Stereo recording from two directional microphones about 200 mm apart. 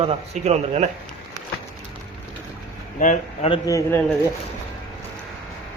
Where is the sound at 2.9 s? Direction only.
40° left (ahead or behind).